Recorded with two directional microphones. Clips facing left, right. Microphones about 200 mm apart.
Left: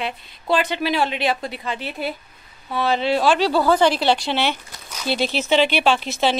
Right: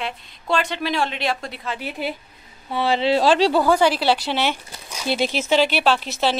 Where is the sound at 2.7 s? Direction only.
25° right (ahead or behind).